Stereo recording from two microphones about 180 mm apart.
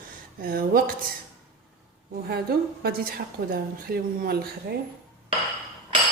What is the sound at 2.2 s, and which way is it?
A woman's voice, 60° right (ahead or behind).